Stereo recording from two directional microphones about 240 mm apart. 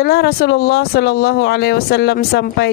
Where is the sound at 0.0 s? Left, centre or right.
Left.